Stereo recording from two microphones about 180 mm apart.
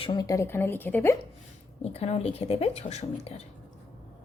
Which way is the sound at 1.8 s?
35° left (ahead or behind).